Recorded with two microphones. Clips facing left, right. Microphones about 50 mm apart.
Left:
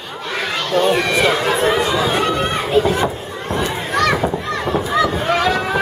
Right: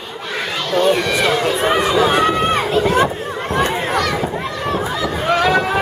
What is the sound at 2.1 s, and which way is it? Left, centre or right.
Crowd, right.